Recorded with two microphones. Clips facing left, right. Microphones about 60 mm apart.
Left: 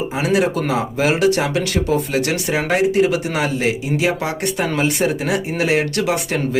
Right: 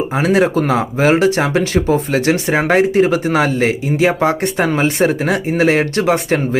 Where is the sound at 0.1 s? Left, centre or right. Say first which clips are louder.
Right 4 dB; right.